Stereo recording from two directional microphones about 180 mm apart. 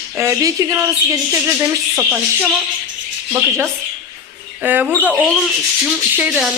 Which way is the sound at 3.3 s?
15° right (ahead or behind).